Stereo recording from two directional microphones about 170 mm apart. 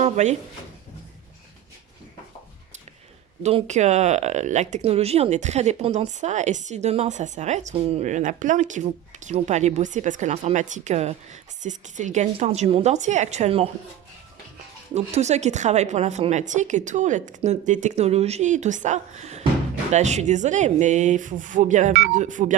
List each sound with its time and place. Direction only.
0.0 s a sound: 40° right (ahead or behind)
3.4 s a woman's voice: 40° right (ahead or behind)
14.9 s a woman's voice: 40° right (ahead or behind)